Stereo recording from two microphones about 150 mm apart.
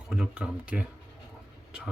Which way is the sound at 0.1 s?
5° right (ahead or behind).